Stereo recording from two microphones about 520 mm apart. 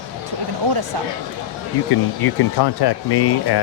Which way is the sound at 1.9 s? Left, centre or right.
Left.